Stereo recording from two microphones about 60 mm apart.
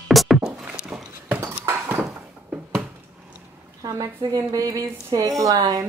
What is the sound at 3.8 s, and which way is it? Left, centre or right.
A woman's voice, right.